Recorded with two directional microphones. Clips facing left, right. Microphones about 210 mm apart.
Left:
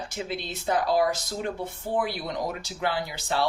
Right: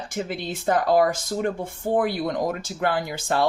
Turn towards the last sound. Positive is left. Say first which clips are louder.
# right 4 dB
turn(degrees=-50)  # may be behind; listen again after turning